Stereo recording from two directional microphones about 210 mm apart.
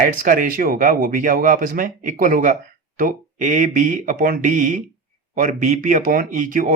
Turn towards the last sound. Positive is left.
turn(degrees=-40)  # may be behind; listen again after turning